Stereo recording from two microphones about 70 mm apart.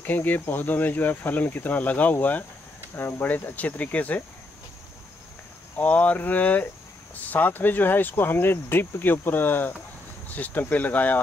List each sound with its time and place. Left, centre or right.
0.0 s speech: left
5.8 s speech: left